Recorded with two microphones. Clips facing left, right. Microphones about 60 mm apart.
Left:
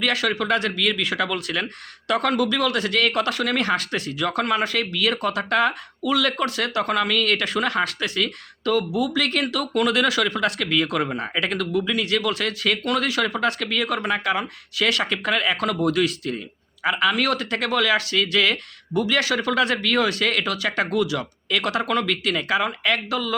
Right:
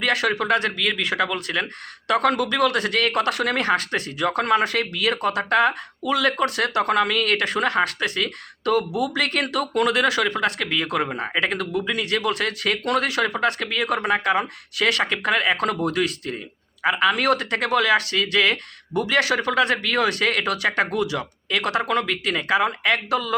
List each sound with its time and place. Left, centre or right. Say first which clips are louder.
0.0 s speech: right 1 dB; right
14.0 s speech: right 2 dB; right